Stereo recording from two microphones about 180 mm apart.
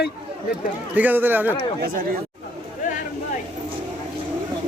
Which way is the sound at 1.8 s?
55° right (ahead or behind).